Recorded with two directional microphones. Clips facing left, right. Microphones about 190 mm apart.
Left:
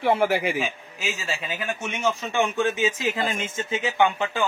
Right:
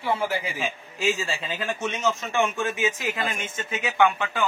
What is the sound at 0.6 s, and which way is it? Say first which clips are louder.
A man's voice: left 1 dB; 5° left (ahead or behind).